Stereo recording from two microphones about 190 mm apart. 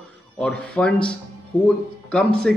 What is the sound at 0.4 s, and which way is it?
Speech, 5° left (ahead or behind).